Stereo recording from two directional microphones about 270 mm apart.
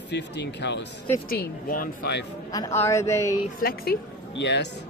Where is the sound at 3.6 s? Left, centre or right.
Left.